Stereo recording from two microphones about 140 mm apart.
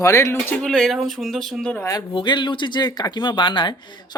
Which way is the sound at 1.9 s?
35° left (ahead or behind).